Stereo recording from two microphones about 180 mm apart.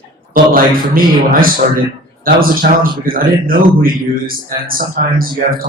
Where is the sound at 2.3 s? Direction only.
55° right (ahead or behind).